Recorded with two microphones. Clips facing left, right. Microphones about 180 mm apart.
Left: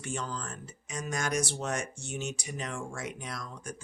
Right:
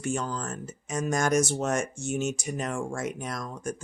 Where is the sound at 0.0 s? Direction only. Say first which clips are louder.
Right 6 dB; 45° right (ahead or behind).